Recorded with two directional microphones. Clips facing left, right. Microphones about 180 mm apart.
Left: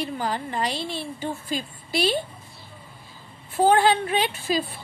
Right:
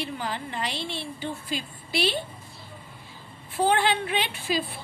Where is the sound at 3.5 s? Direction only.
40° left (ahead or behind).